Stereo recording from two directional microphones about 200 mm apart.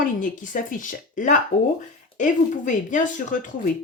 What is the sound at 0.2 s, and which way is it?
Speech, 40° left (ahead or behind).